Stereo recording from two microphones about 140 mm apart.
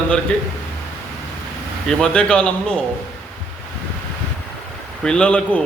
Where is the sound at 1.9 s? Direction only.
5° left (ahead or behind).